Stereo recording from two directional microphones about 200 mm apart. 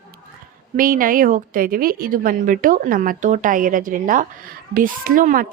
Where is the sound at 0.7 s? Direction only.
45° right (ahead or behind).